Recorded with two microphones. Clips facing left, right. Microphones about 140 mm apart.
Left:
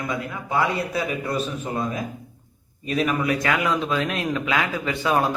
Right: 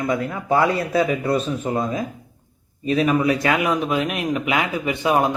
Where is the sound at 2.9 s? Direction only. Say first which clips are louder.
Right 4 dB; 30° right (ahead or behind).